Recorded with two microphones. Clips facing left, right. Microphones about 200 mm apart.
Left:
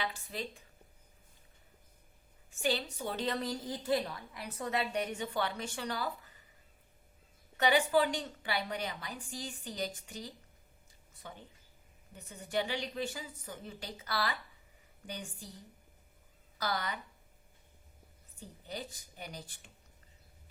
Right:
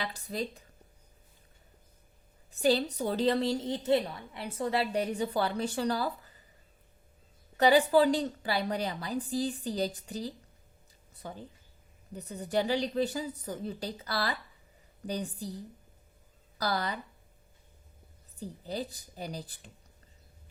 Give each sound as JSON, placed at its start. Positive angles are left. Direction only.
{"t": 0.0, "sound": "a woman's voice", "side_deg": -40}
{"t": 2.5, "sound": "a woman's voice", "side_deg": -35}
{"t": 7.5, "sound": "a woman's voice", "side_deg": -35}
{"t": 18.3, "sound": "a woman's voice", "side_deg": -35}